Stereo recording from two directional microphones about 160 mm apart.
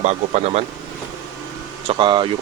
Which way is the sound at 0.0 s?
40° right (ahead or behind).